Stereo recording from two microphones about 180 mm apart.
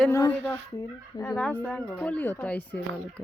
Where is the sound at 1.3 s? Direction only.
10° left (ahead or behind).